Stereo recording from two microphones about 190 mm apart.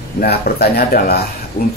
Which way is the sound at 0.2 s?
55° left (ahead or behind).